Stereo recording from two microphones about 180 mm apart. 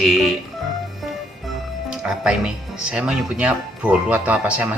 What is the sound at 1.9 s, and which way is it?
Speech, 5° right (ahead or behind).